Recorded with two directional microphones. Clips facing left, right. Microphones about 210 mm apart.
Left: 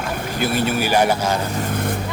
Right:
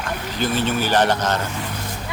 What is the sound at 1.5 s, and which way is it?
Vehicle, 45° left (ahead or behind).